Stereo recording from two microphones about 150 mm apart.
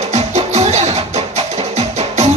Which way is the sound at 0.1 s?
45° right (ahead or behind).